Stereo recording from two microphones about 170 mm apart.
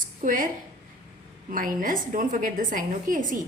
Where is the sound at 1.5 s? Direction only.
55° right (ahead or behind).